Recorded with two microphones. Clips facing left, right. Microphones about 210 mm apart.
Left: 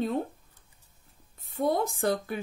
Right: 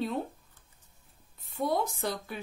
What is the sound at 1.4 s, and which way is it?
Speech, 50° left (ahead or behind).